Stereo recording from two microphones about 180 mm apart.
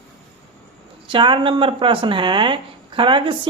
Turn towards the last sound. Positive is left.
turn(degrees=-30)  # may be behind; listen again after turning